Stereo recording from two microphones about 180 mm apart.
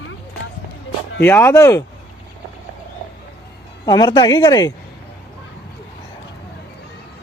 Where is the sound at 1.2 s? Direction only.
10° left (ahead or behind).